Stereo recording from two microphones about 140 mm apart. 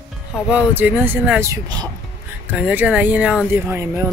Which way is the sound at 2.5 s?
10° right (ahead or behind).